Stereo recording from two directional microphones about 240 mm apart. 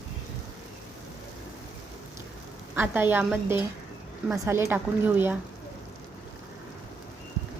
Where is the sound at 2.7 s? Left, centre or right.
Centre.